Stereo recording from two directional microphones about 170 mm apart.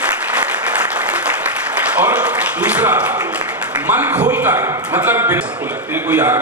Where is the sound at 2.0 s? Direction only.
10° right (ahead or behind).